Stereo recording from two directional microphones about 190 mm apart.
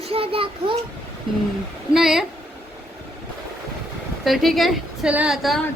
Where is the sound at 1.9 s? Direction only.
Centre (ahead or behind).